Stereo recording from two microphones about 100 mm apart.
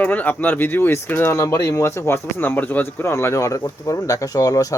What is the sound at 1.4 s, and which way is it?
Speech, 30° left (ahead or behind).